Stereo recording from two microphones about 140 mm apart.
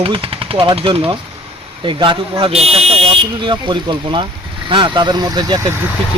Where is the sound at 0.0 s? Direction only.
40° right (ahead or behind).